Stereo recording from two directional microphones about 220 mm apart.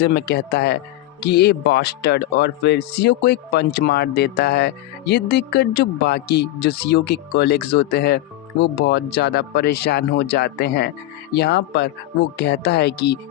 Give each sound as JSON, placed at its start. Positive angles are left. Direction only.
{"t": 0.0, "sound": "speech", "side_deg": 50}